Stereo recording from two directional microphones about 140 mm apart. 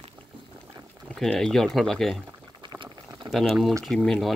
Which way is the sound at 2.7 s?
30° right (ahead or behind).